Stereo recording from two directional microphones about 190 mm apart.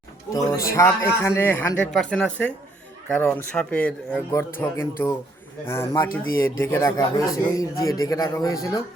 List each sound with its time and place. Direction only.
0.3 s speech: 15° left (ahead or behind)